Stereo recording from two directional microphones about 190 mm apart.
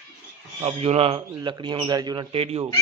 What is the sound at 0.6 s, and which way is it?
Speech, 30° right (ahead or behind).